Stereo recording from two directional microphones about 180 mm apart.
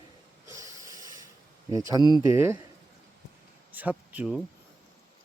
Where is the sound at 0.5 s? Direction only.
15° right (ahead or behind).